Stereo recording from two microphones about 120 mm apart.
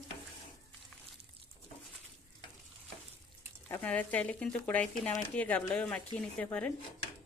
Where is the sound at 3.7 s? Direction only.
15° left (ahead or behind).